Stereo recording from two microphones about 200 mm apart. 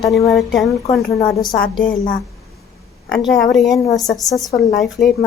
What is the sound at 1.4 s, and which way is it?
Speech, 45° left (ahead or behind).